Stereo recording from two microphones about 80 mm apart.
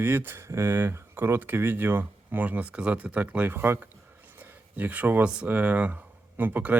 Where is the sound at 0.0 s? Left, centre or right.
Right.